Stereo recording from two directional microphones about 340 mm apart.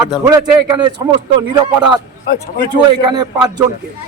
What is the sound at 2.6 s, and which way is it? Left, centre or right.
A man's voice, centre.